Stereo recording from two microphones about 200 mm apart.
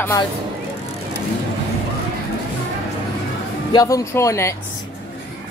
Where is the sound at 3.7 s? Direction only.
15° left (ahead or behind).